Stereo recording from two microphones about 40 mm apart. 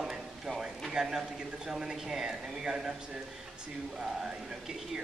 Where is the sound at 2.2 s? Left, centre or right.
Centre.